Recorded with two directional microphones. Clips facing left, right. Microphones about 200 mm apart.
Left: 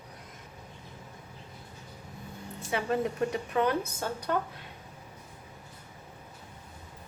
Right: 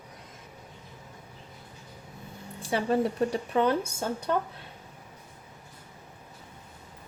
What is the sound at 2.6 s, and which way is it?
Speech, 35° right (ahead or behind).